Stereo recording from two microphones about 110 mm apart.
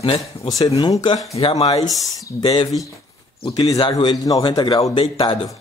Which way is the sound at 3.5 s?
40° left (ahead or behind).